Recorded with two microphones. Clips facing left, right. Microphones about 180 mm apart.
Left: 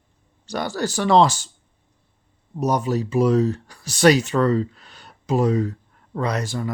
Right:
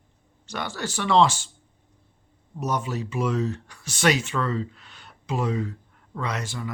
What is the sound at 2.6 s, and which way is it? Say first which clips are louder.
Speech: left 6 dB; 40° left (ahead or behind).